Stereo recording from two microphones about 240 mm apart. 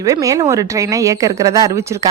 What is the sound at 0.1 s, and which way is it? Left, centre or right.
A woman's voice, centre.